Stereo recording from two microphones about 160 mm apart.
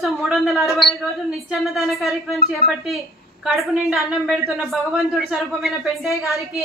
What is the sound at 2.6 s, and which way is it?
Speech, 90° left.